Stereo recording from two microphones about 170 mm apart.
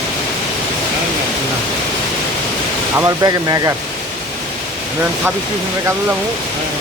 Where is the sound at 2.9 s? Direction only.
20° right (ahead or behind).